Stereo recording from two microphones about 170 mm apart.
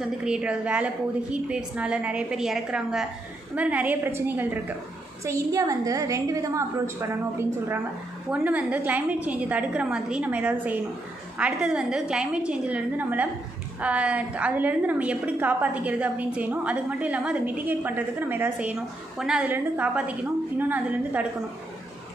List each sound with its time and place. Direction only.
0.0 s a woman's voice: 5° right (ahead or behind)